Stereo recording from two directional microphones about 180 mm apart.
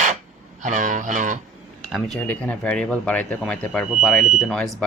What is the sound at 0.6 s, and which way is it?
Fowl, 45° right (ahead or behind).